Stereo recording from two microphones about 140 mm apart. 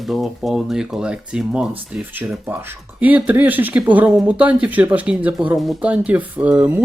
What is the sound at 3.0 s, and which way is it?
Speech, 10° right (ahead or behind).